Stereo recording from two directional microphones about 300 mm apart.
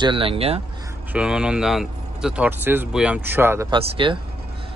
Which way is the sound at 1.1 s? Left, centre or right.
Centre.